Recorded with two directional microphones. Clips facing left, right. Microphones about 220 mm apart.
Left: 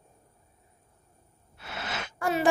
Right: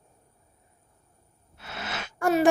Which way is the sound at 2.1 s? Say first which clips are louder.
Right 5 dB; 45° right (ahead or behind).